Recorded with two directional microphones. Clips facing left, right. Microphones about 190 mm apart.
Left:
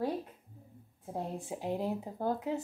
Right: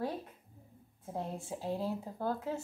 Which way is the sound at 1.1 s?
15° left (ahead or behind).